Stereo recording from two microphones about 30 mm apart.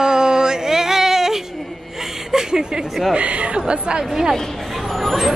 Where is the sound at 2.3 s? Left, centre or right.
Centre.